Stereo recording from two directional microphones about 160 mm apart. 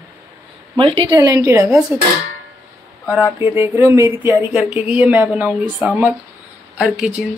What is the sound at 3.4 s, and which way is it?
Speech, 15° right (ahead or behind).